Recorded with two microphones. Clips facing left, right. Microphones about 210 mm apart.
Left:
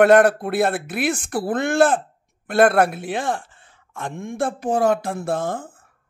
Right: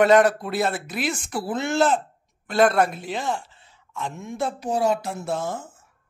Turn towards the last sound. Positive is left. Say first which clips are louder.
# left 4 dB
turn(degrees=55)  # may be behind; listen again after turning